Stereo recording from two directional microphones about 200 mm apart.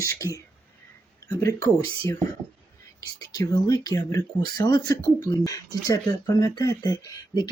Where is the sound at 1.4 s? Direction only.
15° left (ahead or behind).